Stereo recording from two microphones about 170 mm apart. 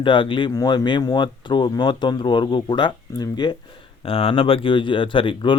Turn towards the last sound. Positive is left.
turn(degrees=30)  # may be behind; listen again after turning